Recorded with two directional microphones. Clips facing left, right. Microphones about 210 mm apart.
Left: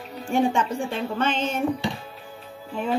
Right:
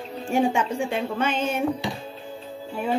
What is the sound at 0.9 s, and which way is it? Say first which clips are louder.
Speech: even; 10° right (ahead or behind).